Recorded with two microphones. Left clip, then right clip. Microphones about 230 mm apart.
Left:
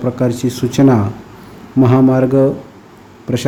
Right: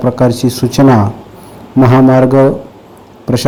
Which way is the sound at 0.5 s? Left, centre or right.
Centre.